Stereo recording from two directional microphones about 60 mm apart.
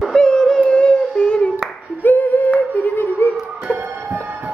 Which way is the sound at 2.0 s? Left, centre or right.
Left.